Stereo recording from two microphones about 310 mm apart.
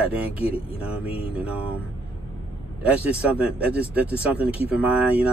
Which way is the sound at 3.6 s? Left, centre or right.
Centre.